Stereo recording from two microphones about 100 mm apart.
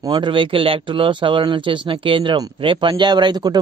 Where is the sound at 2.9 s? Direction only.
45° right (ahead or behind).